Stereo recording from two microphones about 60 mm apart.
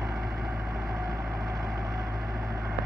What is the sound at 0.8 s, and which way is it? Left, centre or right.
Vehicle, right.